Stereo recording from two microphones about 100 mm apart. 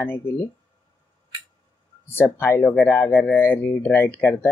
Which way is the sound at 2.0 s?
25° left (ahead or behind).